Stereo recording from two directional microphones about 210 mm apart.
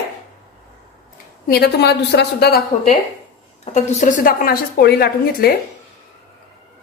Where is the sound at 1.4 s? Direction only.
50° left (ahead or behind).